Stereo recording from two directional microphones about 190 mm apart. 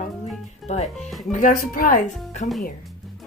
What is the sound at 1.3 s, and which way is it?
A woman's voice, 45° left (ahead or behind).